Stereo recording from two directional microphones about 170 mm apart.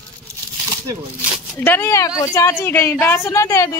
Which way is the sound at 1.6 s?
15° left (ahead or behind).